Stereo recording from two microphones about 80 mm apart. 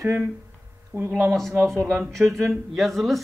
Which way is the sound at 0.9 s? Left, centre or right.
Right.